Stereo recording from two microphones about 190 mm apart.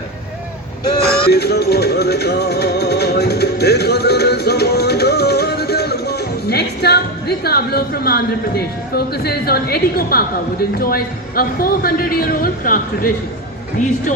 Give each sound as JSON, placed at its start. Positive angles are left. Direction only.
{"t": 1.3, "sound": "music", "side_deg": 60}
{"t": 13.7, "sound": "speech", "side_deg": 40}